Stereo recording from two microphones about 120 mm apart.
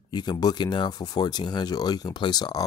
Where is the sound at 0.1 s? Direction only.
35° left (ahead or behind).